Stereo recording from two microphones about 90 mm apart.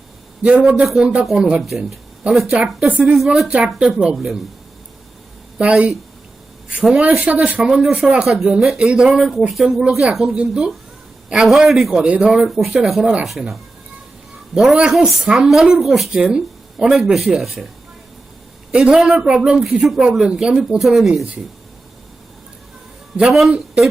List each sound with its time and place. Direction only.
0.4 s a man's voice: 10° right (ahead or behind)
3.0 s a man's voice: centre (ahead or behind)
5.5 s a man's voice: 15° right (ahead or behind)
7.3 s a man's voice: 15° right (ahead or behind)
7.7 s a man's voice: 5° right (ahead or behind)
14.5 s speech: 10° right (ahead or behind)
18.7 s a man's voice: 10° right (ahead or behind)
23.1 s a man's voice: 5° right (ahead or behind)